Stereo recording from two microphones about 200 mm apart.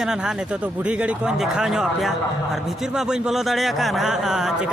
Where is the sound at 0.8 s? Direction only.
5° right (ahead or behind).